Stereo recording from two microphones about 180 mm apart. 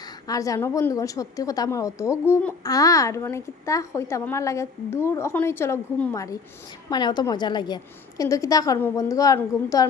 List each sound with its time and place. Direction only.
0.0 s a woman's voice: 20° left (ahead or behind)